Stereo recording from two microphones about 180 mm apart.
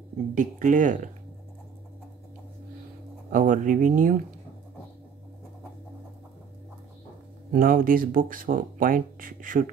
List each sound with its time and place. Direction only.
0.3 s speech: 45° right (ahead or behind)
3.3 s speech: 45° right (ahead or behind)
7.5 s speech: 50° right (ahead or behind)